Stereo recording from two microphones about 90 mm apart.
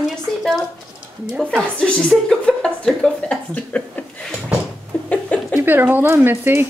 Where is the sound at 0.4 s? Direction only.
Centre (ahead or behind).